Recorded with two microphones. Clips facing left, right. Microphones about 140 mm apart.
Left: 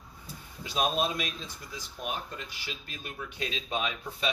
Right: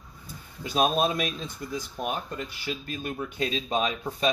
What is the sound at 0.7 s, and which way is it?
Speech, 45° right (ahead or behind).